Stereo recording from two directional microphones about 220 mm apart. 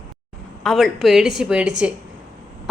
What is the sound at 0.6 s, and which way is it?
A woman's voice, centre (ahead or behind).